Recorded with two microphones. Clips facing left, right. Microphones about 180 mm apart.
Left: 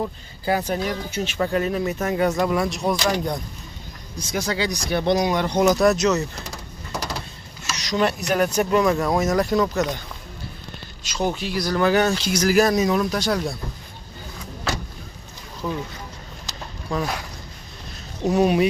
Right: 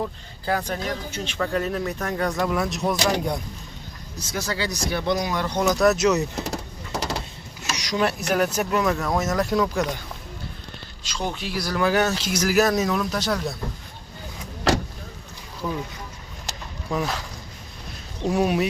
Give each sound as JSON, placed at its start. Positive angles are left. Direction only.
{"t": 0.0, "sound": "speech", "side_deg": 10}
{"t": 4.3, "sound": "speech", "side_deg": 15}
{"t": 5.8, "sound": "speech", "side_deg": -5}
{"t": 6.5, "sound": "a sound", "side_deg": -25}
{"t": 7.7, "sound": "speech", "side_deg": -10}
{"t": 8.9, "sound": "speech", "side_deg": 10}
{"t": 9.2, "sound": "speech", "side_deg": -5}
{"t": 11.1, "sound": "speech", "side_deg": 10}
{"t": 16.9, "sound": "speech", "side_deg": -20}
{"t": 18.3, "sound": "speech", "side_deg": -5}